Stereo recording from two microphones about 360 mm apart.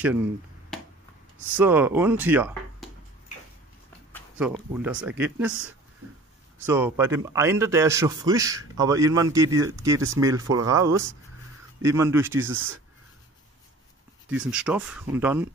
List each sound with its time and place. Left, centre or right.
0.7 s a sound: centre
1.6 s speech: centre
4.1 s speech: centre
6.6 s a man's voice: centre
12.4 s speech: right
14.3 s speech: centre